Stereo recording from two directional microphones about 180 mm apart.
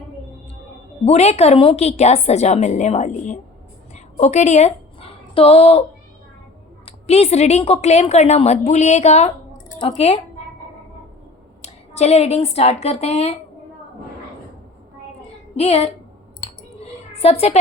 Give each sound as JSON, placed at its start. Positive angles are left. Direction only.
{"t": 1.0, "sound": "a woman's voice", "side_deg": 35}
{"t": 3.9, "sound": "a sound", "side_deg": 40}
{"t": 7.1, "sound": "a woman's voice", "side_deg": 35}
{"t": 11.6, "sound": "a woman's voice", "side_deg": 35}
{"t": 15.5, "sound": "a woman's voice", "side_deg": 35}
{"t": 17.2, "sound": "a woman's voice", "side_deg": 35}